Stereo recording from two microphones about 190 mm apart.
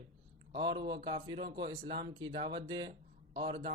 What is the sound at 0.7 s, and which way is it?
Speech, 65° right (ahead or behind).